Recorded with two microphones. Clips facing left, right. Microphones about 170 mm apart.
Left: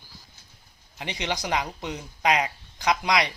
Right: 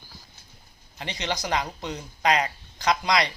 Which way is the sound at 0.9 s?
15° left (ahead or behind).